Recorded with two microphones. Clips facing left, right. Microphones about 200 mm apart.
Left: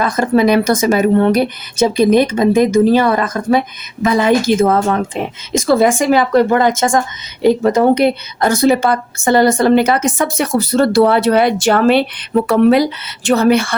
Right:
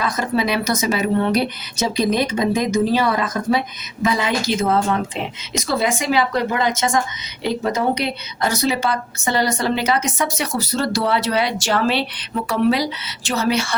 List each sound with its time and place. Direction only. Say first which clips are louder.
0.0 s a woman's voice: left 8 dB; 50° left (ahead or behind)